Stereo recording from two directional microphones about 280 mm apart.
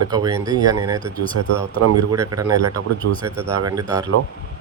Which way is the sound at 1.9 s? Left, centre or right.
Centre.